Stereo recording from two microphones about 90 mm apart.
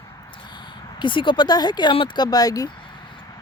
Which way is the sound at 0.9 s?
65° left (ahead or behind).